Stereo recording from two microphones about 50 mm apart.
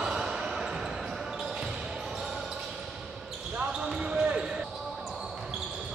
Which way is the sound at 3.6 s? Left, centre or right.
Centre.